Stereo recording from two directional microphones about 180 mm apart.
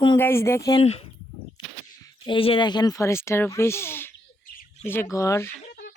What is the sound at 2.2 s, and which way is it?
Speech, 30° left (ahead or behind).